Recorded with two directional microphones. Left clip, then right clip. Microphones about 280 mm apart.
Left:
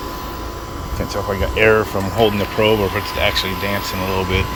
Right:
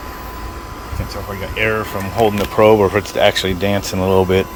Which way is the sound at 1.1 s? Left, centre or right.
Centre.